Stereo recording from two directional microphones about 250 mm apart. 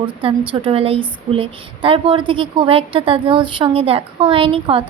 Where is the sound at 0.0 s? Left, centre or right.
Right.